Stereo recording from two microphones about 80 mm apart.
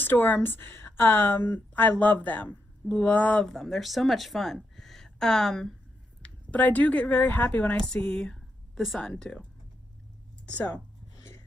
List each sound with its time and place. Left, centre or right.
0.0 s a woman's voice: left
3.4 s speech: centre
6.2 s speech: centre
7.8 s a sound: centre
9.0 s speech: centre